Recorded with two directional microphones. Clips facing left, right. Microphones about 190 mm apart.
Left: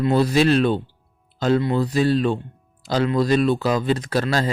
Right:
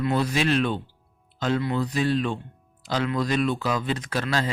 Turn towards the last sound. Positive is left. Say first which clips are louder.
# left 5 dB
turn(degrees=35)  # may be behind; listen again after turning